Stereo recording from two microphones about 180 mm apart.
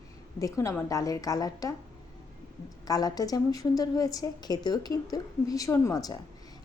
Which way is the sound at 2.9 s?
20° left (ahead or behind).